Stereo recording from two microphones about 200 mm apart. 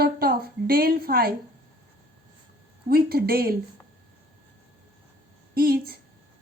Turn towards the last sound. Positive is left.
turn(degrees=-50)  # may be behind; listen again after turning